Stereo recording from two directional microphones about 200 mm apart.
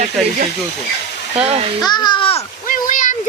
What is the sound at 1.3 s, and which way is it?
Speech, 30° right (ahead or behind).